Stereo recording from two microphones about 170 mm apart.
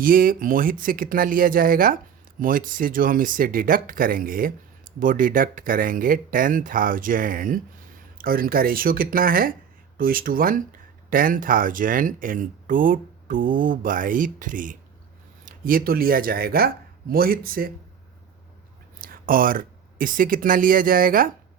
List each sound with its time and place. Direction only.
0.0 s speech: 55° right (ahead or behind)
18.9 s speech: 55° right (ahead or behind)